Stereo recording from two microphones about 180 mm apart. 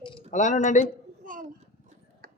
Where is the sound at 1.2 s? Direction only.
50° right (ahead or behind).